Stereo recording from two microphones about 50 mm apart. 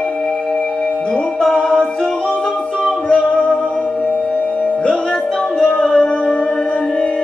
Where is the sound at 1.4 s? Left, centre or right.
Centre.